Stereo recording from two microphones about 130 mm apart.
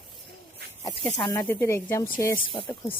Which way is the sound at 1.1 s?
25° left (ahead or behind).